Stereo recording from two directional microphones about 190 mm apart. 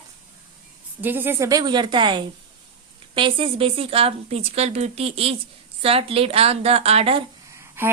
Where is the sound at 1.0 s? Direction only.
10° right (ahead or behind); by 7.3 s 30° right (ahead or behind).